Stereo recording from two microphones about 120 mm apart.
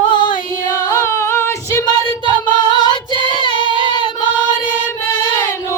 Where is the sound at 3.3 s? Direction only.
40° left (ahead or behind).